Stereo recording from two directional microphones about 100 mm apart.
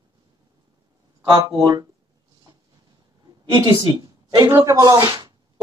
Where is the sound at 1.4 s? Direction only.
35° right (ahead or behind).